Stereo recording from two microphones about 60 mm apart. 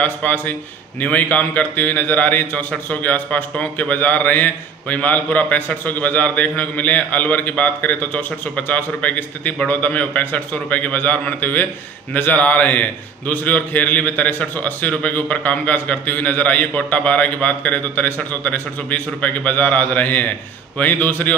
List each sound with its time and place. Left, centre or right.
0.0 s a man's voice: left